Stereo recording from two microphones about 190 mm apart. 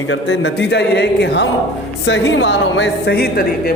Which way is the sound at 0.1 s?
70° left (ahead or behind).